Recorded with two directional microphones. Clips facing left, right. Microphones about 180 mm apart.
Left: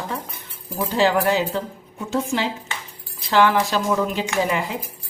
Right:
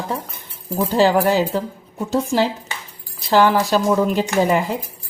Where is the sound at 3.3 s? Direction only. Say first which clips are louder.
Right 3 dB; 40° right (ahead or behind).